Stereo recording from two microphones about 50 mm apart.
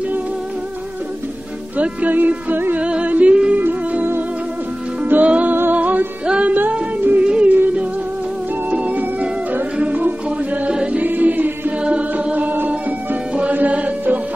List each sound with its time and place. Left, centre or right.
1.8 s music: right
2.8 s music: right
3.5 s music: right
5.2 s music: right
5.5 s music: right
6.2 s music: right
7.0 s music: right
7.2 s music: right
8.6 s music: right
10.7 s music: centre
11.0 s music: right
11.8 s chant: right
12.4 s music: right